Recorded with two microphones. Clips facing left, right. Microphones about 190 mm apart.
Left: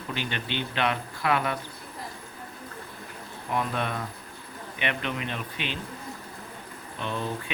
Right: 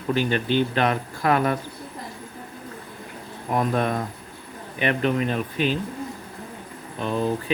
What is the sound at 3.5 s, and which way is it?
Speech, 45° right (ahead or behind).